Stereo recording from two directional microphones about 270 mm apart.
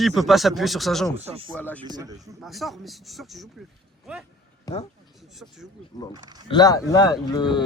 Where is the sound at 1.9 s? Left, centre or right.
Centre.